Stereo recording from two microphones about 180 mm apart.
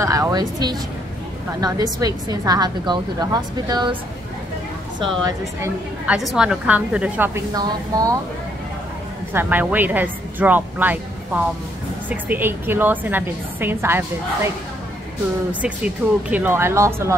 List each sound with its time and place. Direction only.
0.0 s a woman's voice: 20° right (ahead or behind)
6.0 s a woman's voice: 5° right (ahead or behind)
7.5 s a woman's voice: 20° right (ahead or behind)
9.3 s a woman's voice: 10° right (ahead or behind)
15.6 s a woman's voice: 10° right (ahead or behind)